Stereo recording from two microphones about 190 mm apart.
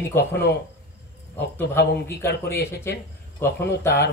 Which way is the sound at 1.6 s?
60° left (ahead or behind).